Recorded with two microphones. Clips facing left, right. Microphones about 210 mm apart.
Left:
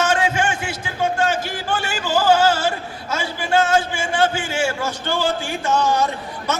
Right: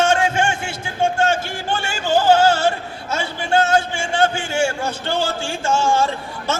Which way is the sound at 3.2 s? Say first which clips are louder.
Even; 25° right (ahead or behind).